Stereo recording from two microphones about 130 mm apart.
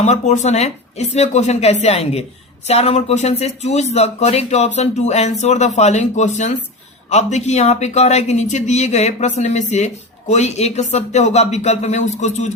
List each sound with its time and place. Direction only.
0.0 s speech: 65° left (ahead or behind)